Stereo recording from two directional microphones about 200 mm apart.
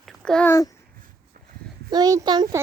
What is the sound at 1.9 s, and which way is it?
Speech, 20° right (ahead or behind).